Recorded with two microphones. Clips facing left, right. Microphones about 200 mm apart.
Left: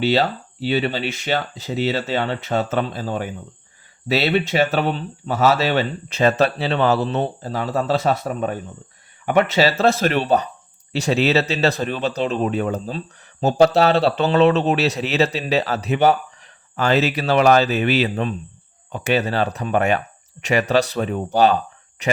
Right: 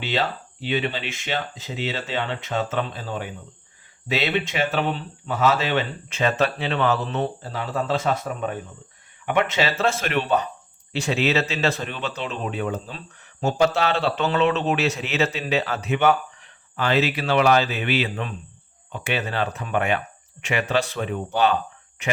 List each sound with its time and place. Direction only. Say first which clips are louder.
0.0 s speech: left 7 dB; 40° left (ahead or behind)